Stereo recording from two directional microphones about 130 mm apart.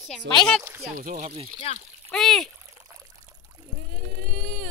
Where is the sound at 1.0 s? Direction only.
75° right (ahead or behind); by 1.5 s 55° right (ahead or behind).